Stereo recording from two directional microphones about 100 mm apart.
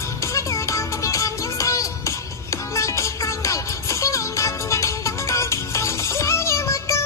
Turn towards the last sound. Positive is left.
turn(degrees=30)  # may be behind; listen again after turning